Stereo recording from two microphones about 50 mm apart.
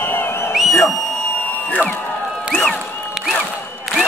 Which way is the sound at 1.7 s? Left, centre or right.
Left.